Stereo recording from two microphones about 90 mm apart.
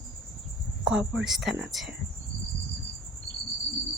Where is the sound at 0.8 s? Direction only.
10° right (ahead or behind).